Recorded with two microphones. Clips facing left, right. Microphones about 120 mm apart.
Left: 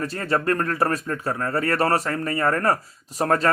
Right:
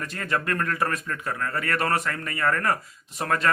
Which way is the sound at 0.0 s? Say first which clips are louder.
Left 5 dB; 35° left (ahead or behind).